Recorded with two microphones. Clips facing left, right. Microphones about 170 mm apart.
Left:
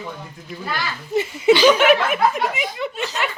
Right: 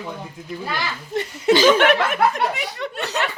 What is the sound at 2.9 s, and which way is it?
Speech, 65° right (ahead or behind).